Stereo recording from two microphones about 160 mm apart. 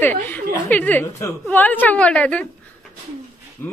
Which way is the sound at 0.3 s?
10° left (ahead or behind).